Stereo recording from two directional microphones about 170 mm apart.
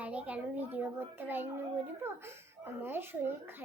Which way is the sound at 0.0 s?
10° right (ahead or behind).